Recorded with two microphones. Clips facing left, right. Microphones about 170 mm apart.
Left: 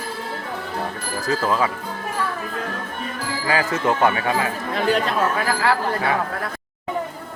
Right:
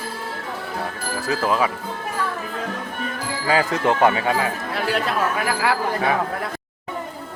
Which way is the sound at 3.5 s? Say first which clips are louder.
Right 2 dB; 20° right (ahead or behind).